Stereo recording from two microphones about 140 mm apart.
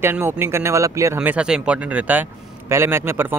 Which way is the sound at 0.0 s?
15° right (ahead or behind).